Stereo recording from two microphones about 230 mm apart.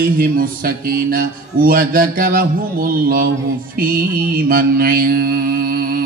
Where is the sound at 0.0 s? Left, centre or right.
Right.